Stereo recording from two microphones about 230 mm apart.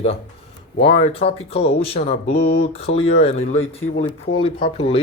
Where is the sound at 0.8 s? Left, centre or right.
Left.